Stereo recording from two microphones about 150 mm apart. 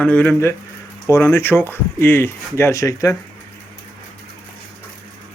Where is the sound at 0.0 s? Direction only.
10° left (ahead or behind).